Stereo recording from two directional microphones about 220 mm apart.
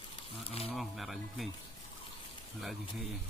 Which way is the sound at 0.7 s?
Centre (ahead or behind).